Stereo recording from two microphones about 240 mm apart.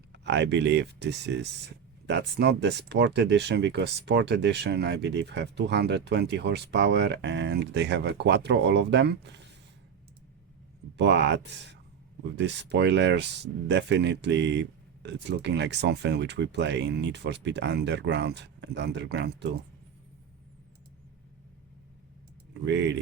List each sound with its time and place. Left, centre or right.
0.1 s speech: right
10.9 s speech: right
22.6 s speech: right